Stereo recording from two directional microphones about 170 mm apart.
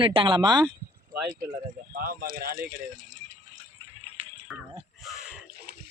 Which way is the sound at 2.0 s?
60° right (ahead or behind).